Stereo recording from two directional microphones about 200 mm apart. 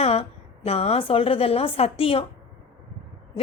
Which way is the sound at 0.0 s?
30° left (ahead or behind).